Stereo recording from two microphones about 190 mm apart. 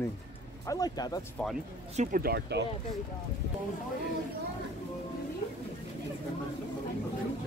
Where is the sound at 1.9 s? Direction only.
50° right (ahead or behind).